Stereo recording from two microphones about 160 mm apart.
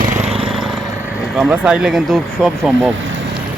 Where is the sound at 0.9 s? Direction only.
15° right (ahead or behind).